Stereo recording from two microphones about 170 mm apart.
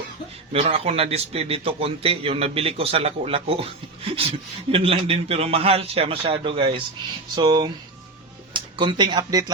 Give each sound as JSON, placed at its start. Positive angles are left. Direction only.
{"t": 0.5, "sound": "a man's voice", "side_deg": -35}